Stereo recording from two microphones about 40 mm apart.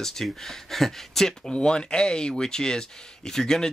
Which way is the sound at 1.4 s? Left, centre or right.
Left.